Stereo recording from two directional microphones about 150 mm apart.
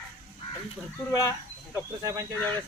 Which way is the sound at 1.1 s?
20° left (ahead or behind).